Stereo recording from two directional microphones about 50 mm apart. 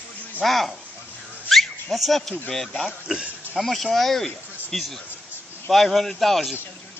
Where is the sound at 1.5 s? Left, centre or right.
Centre.